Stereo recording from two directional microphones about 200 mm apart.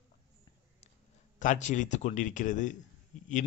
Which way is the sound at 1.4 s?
40° left (ahead or behind).